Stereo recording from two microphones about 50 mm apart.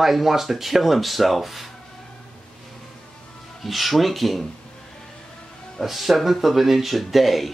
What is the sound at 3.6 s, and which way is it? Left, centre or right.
Speech, centre.